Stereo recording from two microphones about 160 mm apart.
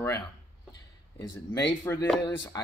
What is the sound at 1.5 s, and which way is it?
Speech, 15° left (ahead or behind).